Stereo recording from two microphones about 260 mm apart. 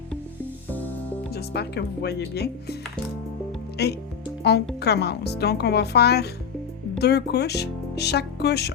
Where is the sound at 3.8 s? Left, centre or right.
Left.